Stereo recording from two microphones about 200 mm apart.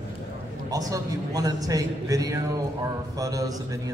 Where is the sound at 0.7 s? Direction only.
15° right (ahead or behind).